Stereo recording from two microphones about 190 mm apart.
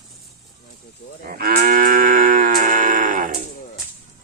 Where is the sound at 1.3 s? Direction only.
50° right (ahead or behind).